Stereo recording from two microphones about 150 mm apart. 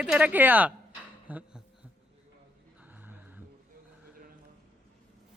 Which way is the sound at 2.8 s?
10° right (ahead or behind).